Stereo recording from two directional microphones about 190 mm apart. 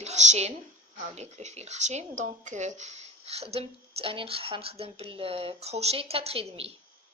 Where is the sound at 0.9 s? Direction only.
35° right (ahead or behind).